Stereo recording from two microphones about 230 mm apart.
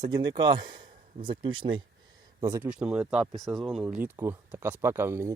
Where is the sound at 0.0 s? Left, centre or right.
Centre.